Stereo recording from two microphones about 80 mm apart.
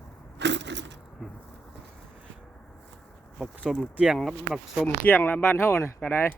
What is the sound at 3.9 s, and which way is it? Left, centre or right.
Speech, centre.